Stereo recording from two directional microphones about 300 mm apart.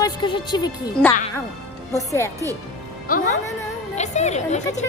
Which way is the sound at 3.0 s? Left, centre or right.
Left.